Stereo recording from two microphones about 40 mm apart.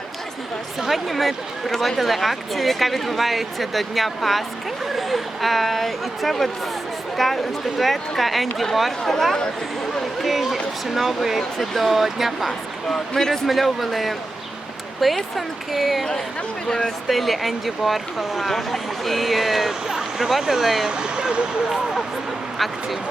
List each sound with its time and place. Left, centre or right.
0.8 s speech: centre
10.2 s a sound: centre
10.9 s speech: centre
12.9 s speech: centre
16.6 s speech: centre
17.1 s speech: centre
20.9 s speech: right
22.5 s speech: centre